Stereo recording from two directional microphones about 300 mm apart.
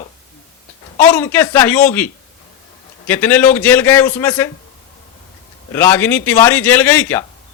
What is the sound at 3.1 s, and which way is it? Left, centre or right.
A man's voice, centre.